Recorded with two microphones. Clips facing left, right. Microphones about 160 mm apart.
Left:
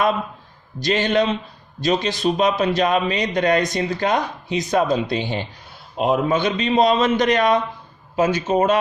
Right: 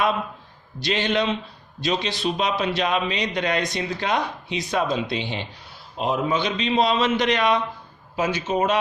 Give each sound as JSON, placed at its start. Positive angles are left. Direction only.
{"t": 0.8, "sound": "a man's voice", "side_deg": 45}
{"t": 6.0, "sound": "a man's voice", "side_deg": 55}